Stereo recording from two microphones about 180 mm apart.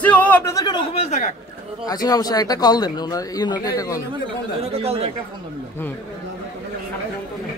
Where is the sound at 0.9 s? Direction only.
35° left (ahead or behind).